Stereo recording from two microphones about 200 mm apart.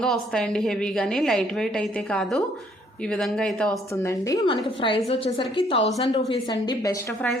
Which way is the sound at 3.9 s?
15° left (ahead or behind).